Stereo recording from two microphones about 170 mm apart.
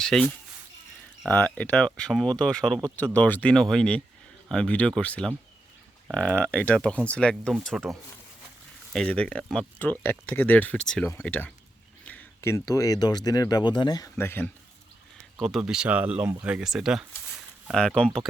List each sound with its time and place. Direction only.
0.0 s speech: 5° left (ahead or behind)
15.4 s speech: centre (ahead or behind)